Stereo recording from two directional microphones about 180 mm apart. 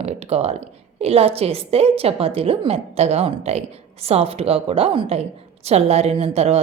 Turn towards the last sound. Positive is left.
turn(degrees=-35)  # may be behind; listen again after turning